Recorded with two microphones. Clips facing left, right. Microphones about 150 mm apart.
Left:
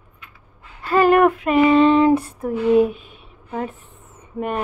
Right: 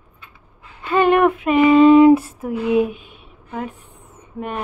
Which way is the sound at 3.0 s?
40° left (ahead or behind).